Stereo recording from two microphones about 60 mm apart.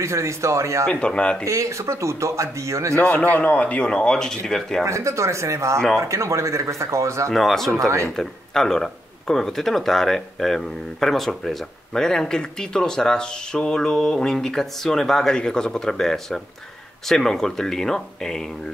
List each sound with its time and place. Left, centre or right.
0.0 s speech: right
0.8 s speech: centre
1.4 s speech: right
3.3 s speech: left; by 4.8 s centre
4.8 s speech: right
5.8 s speech: centre
6.0 s speech: right
7.2 s speech: centre